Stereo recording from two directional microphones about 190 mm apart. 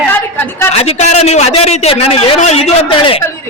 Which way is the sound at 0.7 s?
35° left (ahead or behind).